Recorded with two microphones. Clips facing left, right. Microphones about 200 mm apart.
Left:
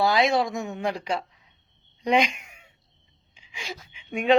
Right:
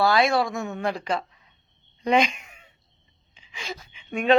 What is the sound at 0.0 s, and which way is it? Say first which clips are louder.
Speech: right 1 dB; 15° left (ahead or behind).